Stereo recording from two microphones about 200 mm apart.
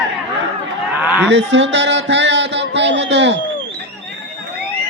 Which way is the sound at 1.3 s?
65° right (ahead or behind).